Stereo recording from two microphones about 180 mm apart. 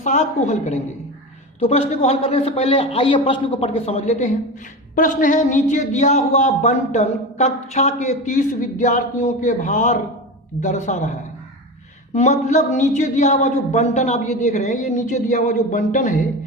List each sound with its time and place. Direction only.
0.0 s a man's voice: 40° left (ahead or behind)